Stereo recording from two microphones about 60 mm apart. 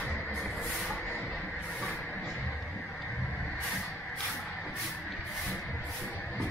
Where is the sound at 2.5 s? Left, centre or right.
Centre.